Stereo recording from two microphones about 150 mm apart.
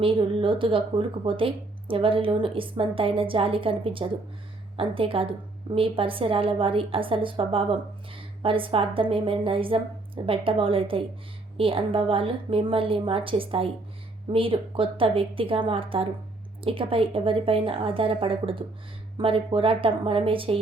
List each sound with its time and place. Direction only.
0.0 s speech: 35° right (ahead or behind)